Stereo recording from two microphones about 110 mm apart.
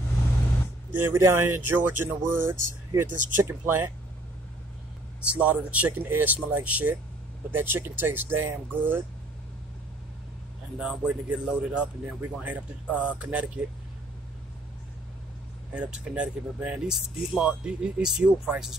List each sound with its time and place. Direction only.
0.9 s speech: 20° right (ahead or behind)
5.3 s speech: 10° right (ahead or behind)
10.8 s speech: 10° right (ahead or behind)
15.7 s speech: 10° right (ahead or behind)